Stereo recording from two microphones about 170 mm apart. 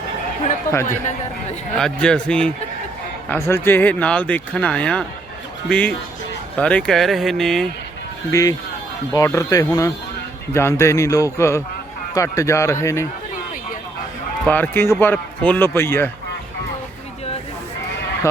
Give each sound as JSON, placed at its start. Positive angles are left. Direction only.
{"t": 0.7, "sound": "speech", "side_deg": 15}
{"t": 1.7, "sound": "speech", "side_deg": 5}
{"t": 8.3, "sound": "speech", "side_deg": 20}
{"t": 14.4, "sound": "speech", "side_deg": 10}